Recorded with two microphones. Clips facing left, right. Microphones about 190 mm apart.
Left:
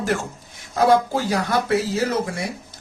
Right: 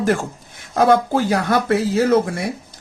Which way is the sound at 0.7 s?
55° right (ahead or behind).